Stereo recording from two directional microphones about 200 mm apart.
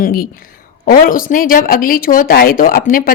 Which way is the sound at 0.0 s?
45° left (ahead or behind).